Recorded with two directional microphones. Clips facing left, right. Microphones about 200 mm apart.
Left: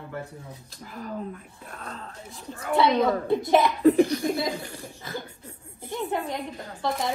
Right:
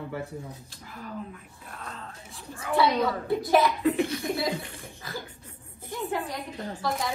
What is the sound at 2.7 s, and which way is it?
Speech, 20° left (ahead or behind).